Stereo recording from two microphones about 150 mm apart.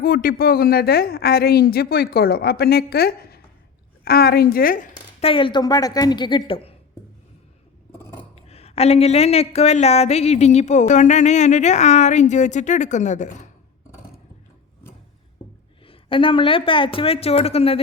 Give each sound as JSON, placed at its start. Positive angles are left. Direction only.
{"t": 0.0, "sound": "a woman's voice", "side_deg": 75}
{"t": 5.2, "sound": "speech", "side_deg": 35}
{"t": 7.9, "sound": "a sound", "side_deg": 15}
{"t": 8.4, "sound": "a woman's voice", "side_deg": 40}
{"t": 15.9, "sound": "speech", "side_deg": 35}